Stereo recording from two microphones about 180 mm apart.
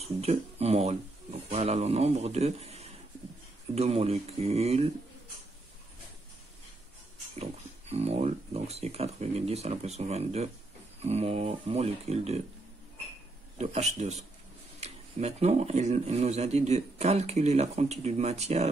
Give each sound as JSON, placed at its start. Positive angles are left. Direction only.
{"t": 0.0, "sound": "speech", "side_deg": -35}
{"t": 7.3, "sound": "speech", "side_deg": -35}
{"t": 13.6, "sound": "speech", "side_deg": -40}